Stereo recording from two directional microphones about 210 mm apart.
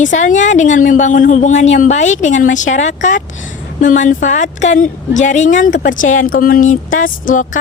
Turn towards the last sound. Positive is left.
turn(degrees=40)  # may be behind; listen again after turning